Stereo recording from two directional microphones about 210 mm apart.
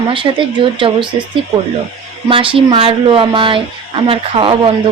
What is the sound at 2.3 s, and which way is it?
Speech, 25° right (ahead or behind).